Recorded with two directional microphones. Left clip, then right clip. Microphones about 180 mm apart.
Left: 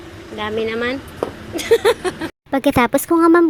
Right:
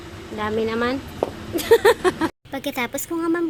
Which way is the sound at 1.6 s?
15° right (ahead or behind).